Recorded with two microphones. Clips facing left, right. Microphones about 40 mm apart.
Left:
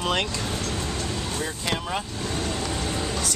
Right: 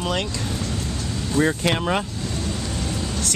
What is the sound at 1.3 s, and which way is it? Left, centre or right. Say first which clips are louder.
Speech: right 12 dB; right.